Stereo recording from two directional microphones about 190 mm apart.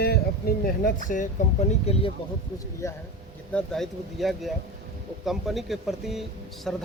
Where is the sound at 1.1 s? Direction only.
40° left (ahead or behind).